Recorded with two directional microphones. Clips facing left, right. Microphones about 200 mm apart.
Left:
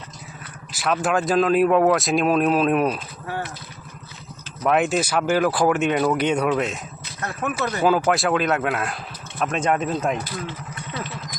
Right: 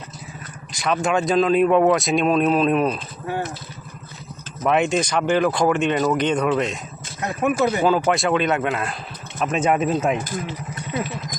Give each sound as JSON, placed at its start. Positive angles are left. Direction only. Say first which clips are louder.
{"t": 0.7, "sound": "speech", "louder": "right 1 dB", "side_deg": 5}
{"t": 4.6, "sound": "speech", "louder": "right 1 dB", "side_deg": 0}
{"t": 7.2, "sound": "speech", "louder": "right 6 dB", "side_deg": -15}
{"t": 7.9, "sound": "speech", "louder": "even", "side_deg": 5}